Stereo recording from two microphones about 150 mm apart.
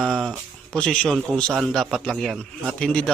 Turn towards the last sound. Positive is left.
turn(degrees=5)  # may be behind; listen again after turning